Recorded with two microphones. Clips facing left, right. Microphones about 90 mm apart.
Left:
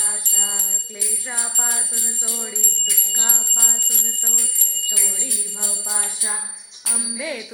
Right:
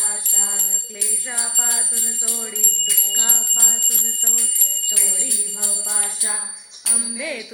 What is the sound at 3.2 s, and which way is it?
Speech, 15° left (ahead or behind).